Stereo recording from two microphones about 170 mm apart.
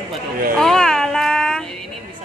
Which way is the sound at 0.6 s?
5° left (ahead or behind).